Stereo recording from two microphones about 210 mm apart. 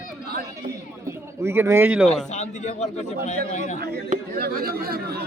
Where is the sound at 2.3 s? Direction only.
35° left (ahead or behind).